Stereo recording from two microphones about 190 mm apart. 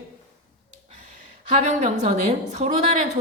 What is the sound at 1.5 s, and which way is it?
A woman's voice, 35° right (ahead or behind).